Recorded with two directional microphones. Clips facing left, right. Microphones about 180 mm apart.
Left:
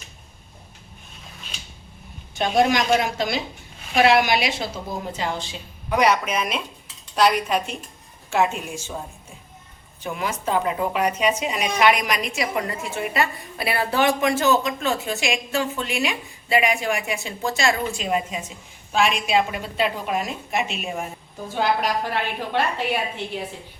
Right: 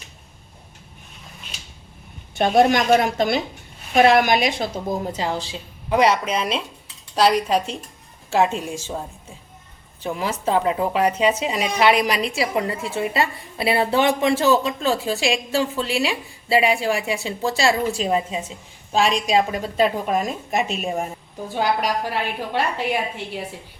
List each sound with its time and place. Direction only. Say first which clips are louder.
2.3 s a woman's voice: right 3 dB; 50° right (ahead or behind)
5.2 s a woman's voice: right 2 dB; 35° right (ahead or behind)
10.0 s a woman's voice: right 2 dB; 30° right (ahead or behind)
21.8 s a woman's voice: right 1 dB; 10° right (ahead or behind)